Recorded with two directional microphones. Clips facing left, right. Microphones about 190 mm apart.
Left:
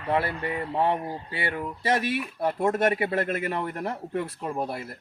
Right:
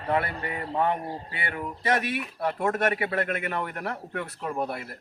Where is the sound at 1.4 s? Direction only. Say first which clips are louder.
Left 1 dB; 30° left (ahead or behind).